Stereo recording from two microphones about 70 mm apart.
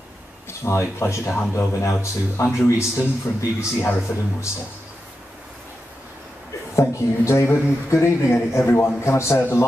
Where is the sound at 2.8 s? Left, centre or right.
Left.